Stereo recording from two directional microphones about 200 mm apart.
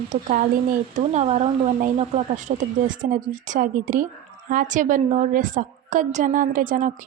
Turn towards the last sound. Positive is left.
turn(degrees=-40)  # may be behind; listen again after turning